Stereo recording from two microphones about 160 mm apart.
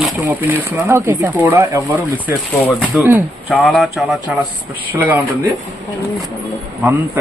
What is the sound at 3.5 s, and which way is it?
Speech, 5° left (ahead or behind).